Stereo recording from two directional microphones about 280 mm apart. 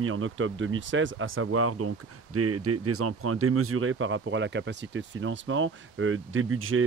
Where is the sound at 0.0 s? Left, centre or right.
Right.